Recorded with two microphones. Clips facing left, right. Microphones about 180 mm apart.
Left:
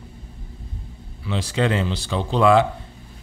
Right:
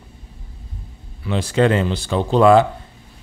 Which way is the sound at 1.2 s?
50° right (ahead or behind).